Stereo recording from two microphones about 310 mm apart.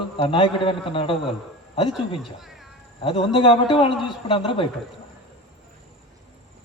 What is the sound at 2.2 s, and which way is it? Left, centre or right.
Speech, centre.